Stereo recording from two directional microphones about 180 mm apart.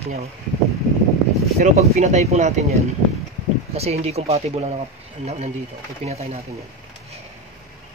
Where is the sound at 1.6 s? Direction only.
40° right (ahead or behind).